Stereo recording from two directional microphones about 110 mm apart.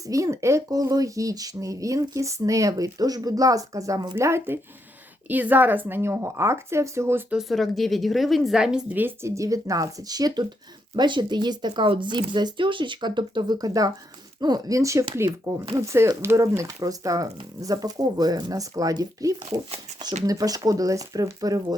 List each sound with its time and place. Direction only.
0.1 s speech: 30° right (ahead or behind)
7.3 s a woman's voice: centre (ahead or behind)
9.0 s speech: 20° right (ahead or behind)